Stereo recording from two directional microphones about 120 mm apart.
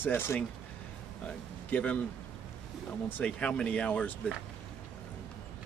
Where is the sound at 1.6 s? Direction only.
10° left (ahead or behind).